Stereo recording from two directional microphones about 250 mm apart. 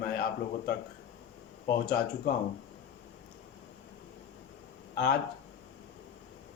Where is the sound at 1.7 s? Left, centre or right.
Left.